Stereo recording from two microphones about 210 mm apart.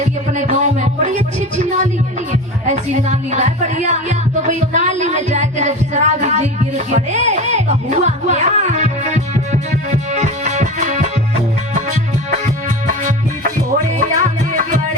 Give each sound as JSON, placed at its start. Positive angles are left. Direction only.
{"t": 0.0, "sound": "music", "side_deg": -35}
{"t": 1.5, "sound": "speech", "side_deg": -35}
{"t": 2.3, "sound": "music", "side_deg": -35}
{"t": 12.9, "sound": "music", "side_deg": -35}